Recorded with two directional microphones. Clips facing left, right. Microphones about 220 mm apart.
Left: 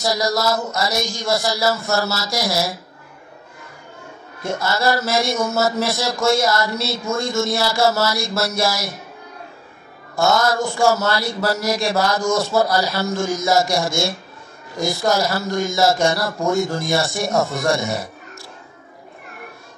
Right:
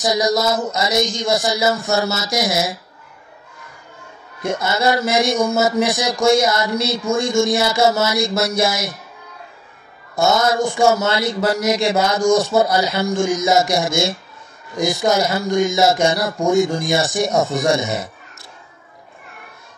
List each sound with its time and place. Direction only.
0.0 s speech: 20° right (ahead or behind)
4.4 s speech: 20° right (ahead or behind)
10.1 s speech: 20° right (ahead or behind)